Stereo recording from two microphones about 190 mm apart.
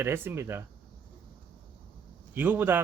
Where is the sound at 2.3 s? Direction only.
10° right (ahead or behind).